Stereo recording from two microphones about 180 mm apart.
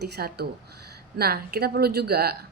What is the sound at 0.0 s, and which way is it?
A woman's voice, 65° right (ahead or behind).